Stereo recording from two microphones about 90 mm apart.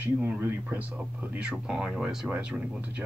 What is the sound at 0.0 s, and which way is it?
Speech, 25° right (ahead or behind).